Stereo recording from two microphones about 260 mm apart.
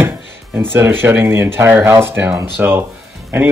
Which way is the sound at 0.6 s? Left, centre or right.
Centre.